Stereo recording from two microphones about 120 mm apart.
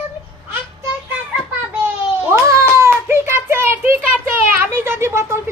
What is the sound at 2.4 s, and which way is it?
Cat, 25° right (ahead or behind).